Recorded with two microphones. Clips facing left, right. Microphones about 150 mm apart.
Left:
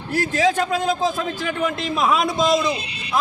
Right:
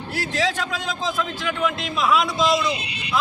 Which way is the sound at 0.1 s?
45° left (ahead or behind).